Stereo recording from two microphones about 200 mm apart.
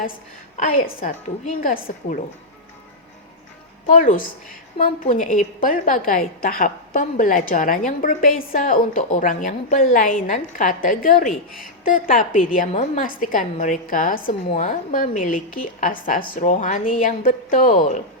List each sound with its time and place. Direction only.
0.5 s a woman's voice: 35° left (ahead or behind)
3.8 s a woman's voice: 40° left (ahead or behind)